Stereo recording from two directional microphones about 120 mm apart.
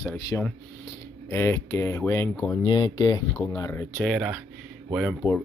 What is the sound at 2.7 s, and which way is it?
Speech, 35° left (ahead or behind).